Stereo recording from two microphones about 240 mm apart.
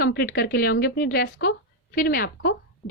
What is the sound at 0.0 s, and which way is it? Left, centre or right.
A woman's voice, left.